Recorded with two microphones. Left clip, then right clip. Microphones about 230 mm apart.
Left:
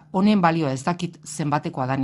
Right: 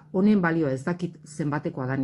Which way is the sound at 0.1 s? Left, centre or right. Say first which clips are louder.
Left 4 dB; left.